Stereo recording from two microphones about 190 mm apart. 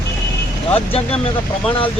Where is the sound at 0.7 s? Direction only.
30° left (ahead or behind).